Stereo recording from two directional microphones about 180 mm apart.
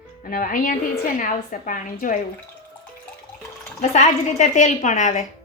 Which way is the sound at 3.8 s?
40° left (ahead or behind).